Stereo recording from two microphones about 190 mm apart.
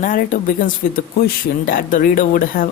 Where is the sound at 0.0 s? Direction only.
45° left (ahead or behind).